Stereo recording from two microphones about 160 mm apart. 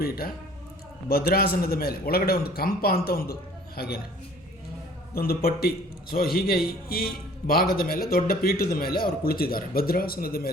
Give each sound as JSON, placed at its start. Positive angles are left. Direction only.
{"t": 1.0, "sound": "a man's voice", "side_deg": 70}
{"t": 5.1, "sound": "a man's voice", "side_deg": 70}